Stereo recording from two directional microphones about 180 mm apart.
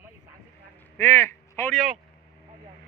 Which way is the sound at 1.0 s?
10° left (ahead or behind).